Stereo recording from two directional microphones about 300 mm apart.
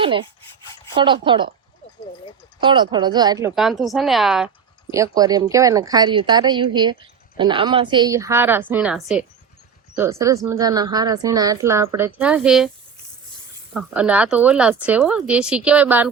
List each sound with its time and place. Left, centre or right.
0.0 s a woman's voice: centre
2.6 s a woman's voice: centre
13.7 s speech: centre